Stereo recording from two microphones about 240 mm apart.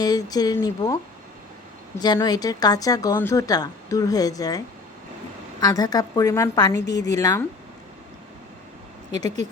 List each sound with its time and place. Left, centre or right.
0.0 s speech: centre
2.0 s speech: centre
9.1 s speech: centre